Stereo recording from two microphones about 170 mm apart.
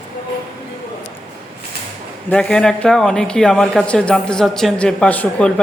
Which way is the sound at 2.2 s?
5° left (ahead or behind).